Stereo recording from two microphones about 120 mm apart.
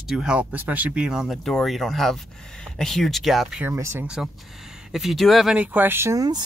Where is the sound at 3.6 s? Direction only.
20° right (ahead or behind).